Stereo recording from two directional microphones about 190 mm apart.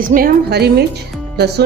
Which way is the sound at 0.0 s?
50° right (ahead or behind).